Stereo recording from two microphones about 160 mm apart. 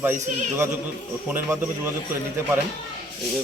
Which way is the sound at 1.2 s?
5° right (ahead or behind).